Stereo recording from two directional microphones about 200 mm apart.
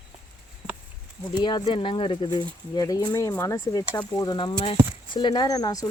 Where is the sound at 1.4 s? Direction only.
25° left (ahead or behind).